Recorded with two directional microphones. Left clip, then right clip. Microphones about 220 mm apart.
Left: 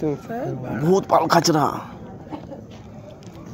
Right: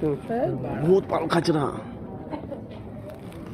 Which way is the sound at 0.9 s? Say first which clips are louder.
Left 6 dB; 55° left (ahead or behind).